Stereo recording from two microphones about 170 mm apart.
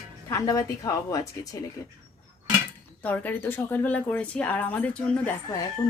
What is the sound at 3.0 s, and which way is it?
Speech, 10° left (ahead or behind).